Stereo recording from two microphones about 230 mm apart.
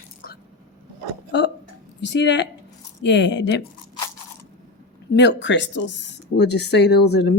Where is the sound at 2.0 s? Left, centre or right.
Left.